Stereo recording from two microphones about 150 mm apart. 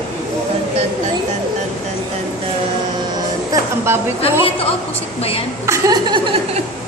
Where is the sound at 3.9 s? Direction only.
15° right (ahead or behind).